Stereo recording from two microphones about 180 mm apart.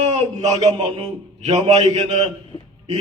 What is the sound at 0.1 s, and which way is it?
A man's voice, 35° right (ahead or behind).